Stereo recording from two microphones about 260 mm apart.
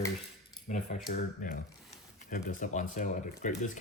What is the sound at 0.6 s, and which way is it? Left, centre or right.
Speech, left.